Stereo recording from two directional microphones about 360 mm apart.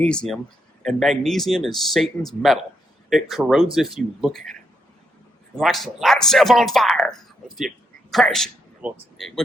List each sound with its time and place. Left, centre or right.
0.0 s speech: centre
5.5 s speech: centre